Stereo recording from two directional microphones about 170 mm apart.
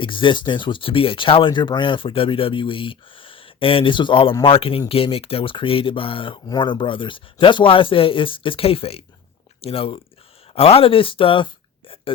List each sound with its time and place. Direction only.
0.0 s speech: 30° left (ahead or behind)